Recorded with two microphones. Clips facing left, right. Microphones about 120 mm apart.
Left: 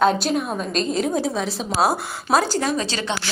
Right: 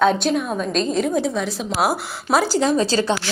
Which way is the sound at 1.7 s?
30° left (ahead or behind).